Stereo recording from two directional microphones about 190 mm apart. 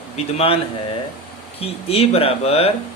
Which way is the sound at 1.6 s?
30° left (ahead or behind).